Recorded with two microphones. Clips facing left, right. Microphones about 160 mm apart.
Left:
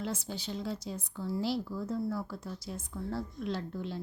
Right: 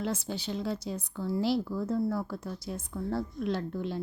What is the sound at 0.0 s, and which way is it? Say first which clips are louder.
Speech: right 4 dB; 65° right (ahead or behind).